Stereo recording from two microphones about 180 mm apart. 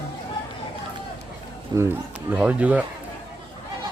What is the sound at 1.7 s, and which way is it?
Speech, 20° right (ahead or behind).